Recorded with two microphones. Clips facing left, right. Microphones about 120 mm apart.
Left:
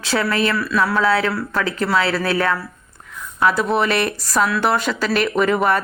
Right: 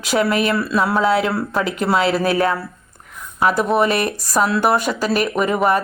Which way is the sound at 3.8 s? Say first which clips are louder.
Right 2 dB; 40° right (ahead or behind).